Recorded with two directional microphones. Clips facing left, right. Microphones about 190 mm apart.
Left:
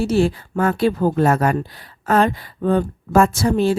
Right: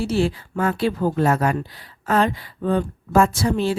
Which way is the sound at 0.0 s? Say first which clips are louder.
Left 4 dB; 45° left (ahead or behind).